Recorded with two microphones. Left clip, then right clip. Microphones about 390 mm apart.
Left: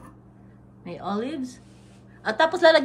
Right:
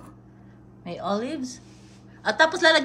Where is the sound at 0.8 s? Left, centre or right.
Centre.